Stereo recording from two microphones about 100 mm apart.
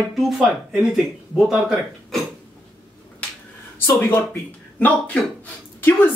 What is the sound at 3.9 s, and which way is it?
Speech, 20° left (ahead or behind).